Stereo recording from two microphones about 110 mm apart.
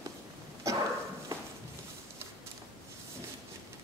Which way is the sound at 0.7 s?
30° right (ahead or behind).